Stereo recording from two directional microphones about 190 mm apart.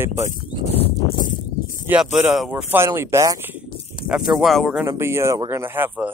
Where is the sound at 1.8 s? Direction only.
10° right (ahead or behind).